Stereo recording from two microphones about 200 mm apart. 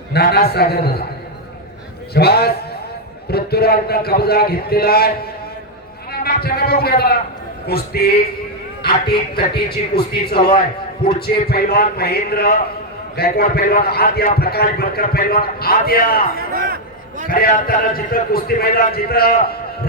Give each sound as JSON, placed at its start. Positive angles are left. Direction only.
{"t": 0.1, "sound": "a man's voice", "side_deg": 50}
{"t": 2.1, "sound": "a man's voice", "side_deg": 50}
{"t": 11.4, "sound": "a man's voice", "side_deg": 50}
{"t": 16.5, "sound": "a sound", "side_deg": -45}
{"t": 17.2, "sound": "a man's voice", "side_deg": 45}